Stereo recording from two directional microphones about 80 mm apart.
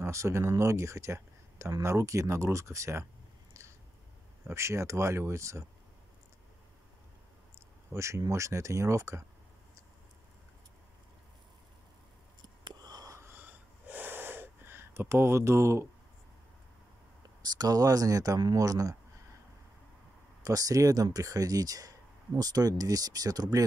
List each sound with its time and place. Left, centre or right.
0.0 s speech: right
4.5 s speech: right
7.9 s speech: right
12.6 s whispering: right
13.2 s wheeze: right
17.4 s speech: right
20.4 s speech: right